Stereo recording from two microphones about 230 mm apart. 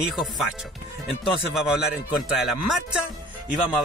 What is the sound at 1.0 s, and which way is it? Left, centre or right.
A man's voice, centre.